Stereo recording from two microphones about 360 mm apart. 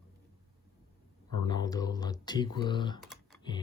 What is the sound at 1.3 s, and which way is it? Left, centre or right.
Speech, centre.